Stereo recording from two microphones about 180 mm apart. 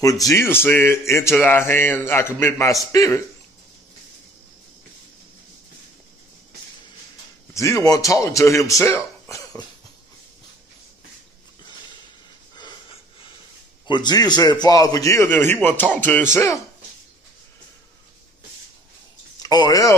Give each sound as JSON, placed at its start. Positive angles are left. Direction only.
{"t": 0.0, "sound": "speech", "side_deg": 20}
{"t": 7.5, "sound": "speech", "side_deg": 15}
{"t": 13.8, "sound": "speech", "side_deg": 25}
{"t": 19.4, "sound": "speech", "side_deg": 20}